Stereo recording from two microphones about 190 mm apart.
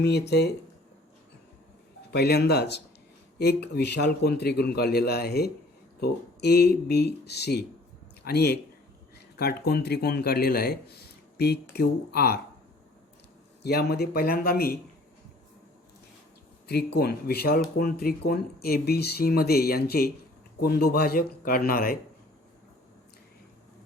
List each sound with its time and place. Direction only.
0.0 s speech: 60° left (ahead or behind)
2.1 s speech: 60° left (ahead or behind)
13.6 s speech: 60° left (ahead or behind)
16.6 s speech: 60° left (ahead or behind)